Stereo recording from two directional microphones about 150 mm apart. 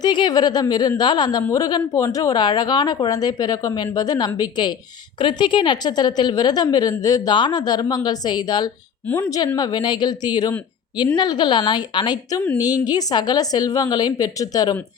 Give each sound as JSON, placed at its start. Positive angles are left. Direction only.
{"t": 0.0, "sound": "a woman's voice", "side_deg": 30}
{"t": 9.0, "sound": "a woman's voice", "side_deg": 15}
{"t": 9.6, "sound": "a woman's voice", "side_deg": 30}